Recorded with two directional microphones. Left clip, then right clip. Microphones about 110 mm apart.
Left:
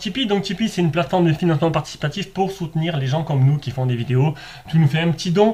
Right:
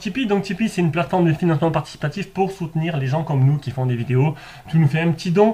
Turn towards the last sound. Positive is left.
turn(degrees=0)  # may be behind; listen again after turning